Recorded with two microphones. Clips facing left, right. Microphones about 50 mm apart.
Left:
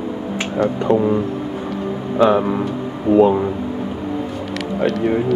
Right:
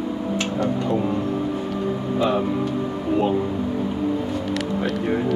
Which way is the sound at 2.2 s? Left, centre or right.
Left.